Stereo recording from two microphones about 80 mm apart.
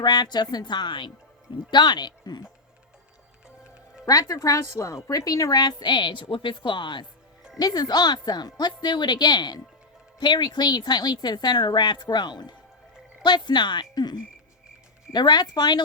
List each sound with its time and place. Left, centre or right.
0.0 s speech: left
1.7 s speech: left
4.0 s a woman's voice: left
7.5 s speech: left